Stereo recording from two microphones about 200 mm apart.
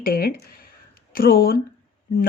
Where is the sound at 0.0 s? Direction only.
45° left (ahead or behind).